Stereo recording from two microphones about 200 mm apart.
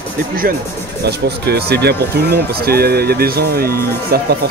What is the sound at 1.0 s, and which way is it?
Speech, 55° right (ahead or behind).